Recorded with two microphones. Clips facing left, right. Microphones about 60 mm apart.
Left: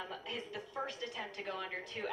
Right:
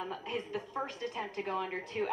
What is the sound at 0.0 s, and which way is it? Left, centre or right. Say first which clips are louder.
A woman's voice: right 5 dB; right.